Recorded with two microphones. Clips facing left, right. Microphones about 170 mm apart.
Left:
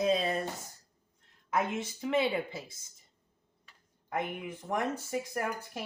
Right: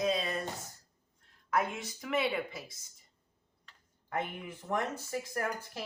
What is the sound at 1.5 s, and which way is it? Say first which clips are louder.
Speech: left 1 dB; 25° left (ahead or behind).